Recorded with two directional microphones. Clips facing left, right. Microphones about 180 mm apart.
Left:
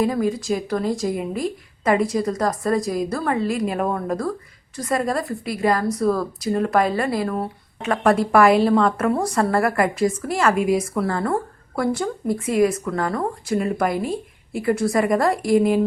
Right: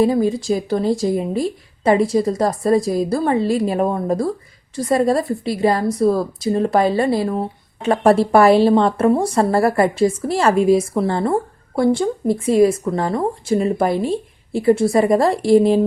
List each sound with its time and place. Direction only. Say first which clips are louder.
0.0 s speech: right 5 dB; 30° right (ahead or behind)